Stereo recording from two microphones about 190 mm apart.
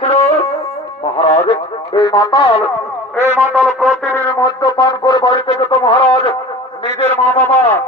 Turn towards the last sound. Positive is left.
turn(degrees=10)  # may be behind; listen again after turning